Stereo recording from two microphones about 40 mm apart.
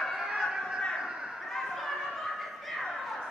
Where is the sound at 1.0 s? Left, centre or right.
Centre.